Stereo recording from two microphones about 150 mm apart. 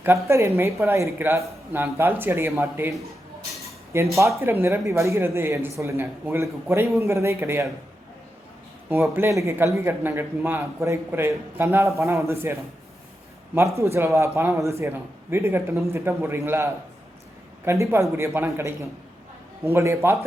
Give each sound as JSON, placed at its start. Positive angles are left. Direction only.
{"t": 0.0, "sound": "a man's voice", "side_deg": -20}
{"t": 3.9, "sound": "a man's voice", "side_deg": -15}
{"t": 9.1, "sound": "a man's voice", "side_deg": -20}
{"t": 17.7, "sound": "a man's voice", "side_deg": -20}